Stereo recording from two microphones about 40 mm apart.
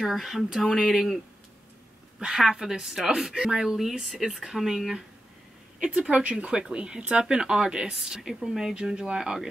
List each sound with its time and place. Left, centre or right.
0.2 s speech: centre
2.1 s speech: centre
5.9 s speech: right; by 9.5 s centre